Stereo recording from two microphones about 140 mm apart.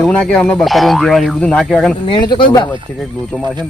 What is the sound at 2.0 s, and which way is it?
Speech, 35° left (ahead or behind).